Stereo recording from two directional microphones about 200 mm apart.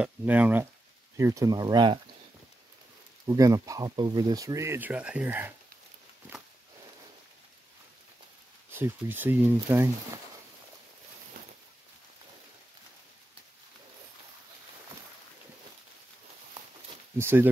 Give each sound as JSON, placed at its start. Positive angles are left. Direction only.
{"t": 0.0, "sound": "speech", "side_deg": -10}
{"t": 3.3, "sound": "speech", "side_deg": -15}
{"t": 8.7, "sound": "speech", "side_deg": -10}
{"t": 17.2, "sound": "speech", "side_deg": -10}